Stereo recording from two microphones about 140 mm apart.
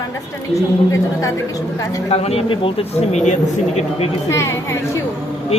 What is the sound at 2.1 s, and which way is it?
A man's voice, 45° left (ahead or behind).